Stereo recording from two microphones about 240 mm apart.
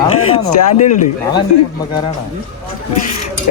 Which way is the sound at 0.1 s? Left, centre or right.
Left.